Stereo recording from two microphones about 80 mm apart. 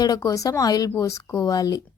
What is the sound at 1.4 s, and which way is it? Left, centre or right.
Speech, left.